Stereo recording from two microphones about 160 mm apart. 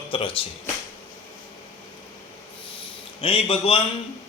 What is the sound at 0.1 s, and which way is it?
Speech, 35° left (ahead or behind).